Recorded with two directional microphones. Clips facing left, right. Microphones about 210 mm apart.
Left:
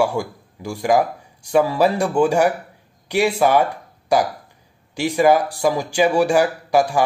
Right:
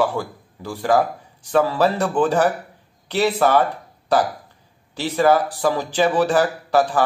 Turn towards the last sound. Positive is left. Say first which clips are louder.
# left 1 dB
turn(degrees=15)  # may be behind; listen again after turning